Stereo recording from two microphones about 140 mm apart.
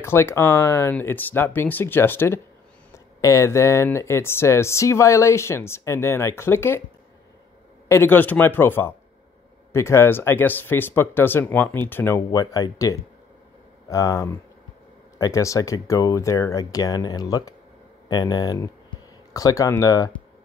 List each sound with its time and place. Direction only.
0.0 s speech: 15° left (ahead or behind)
7.9 s speech: 15° left (ahead or behind)
12.3 s speech: 25° left (ahead or behind)
18.0 s a sound: 30° left (ahead or behind)
19.8 s speech: 25° left (ahead or behind)